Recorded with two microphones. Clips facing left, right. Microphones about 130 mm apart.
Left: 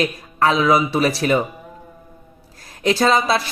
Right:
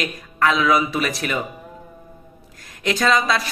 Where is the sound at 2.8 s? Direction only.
30° left (ahead or behind).